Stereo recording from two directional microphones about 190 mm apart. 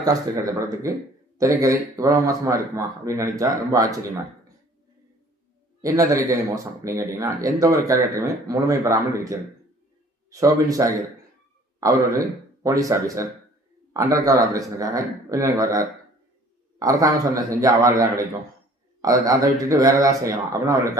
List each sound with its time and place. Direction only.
0.0 s speech: 20° right (ahead or behind)
5.8 s a man's voice: 15° right (ahead or behind)